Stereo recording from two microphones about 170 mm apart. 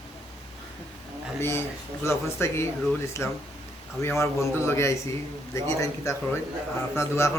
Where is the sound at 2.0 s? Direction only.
15° left (ahead or behind).